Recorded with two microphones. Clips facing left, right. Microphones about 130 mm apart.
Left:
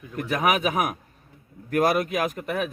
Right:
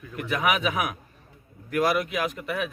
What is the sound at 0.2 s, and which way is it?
A man's voice, 40° left (ahead or behind).